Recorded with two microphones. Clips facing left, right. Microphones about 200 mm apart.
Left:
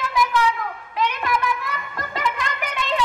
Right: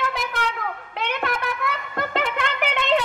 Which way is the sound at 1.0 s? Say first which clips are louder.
Left 3 dB; 60° right (ahead or behind).